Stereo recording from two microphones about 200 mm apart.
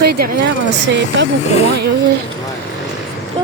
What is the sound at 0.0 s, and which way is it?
Speech, 50° right (ahead or behind).